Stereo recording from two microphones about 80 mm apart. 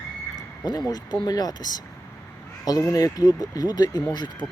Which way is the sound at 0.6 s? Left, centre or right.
Left.